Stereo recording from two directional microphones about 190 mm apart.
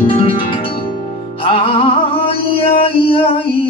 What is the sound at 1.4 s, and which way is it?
Music, 30° left (ahead or behind).